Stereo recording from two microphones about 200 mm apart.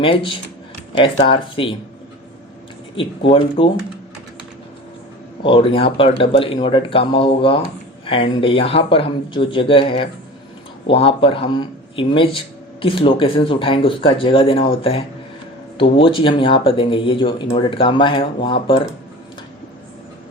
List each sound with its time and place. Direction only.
0.0 s speech: 25° left (ahead or behind)
2.9 s speech: 25° left (ahead or behind)
5.4 s speech: 25° left (ahead or behind)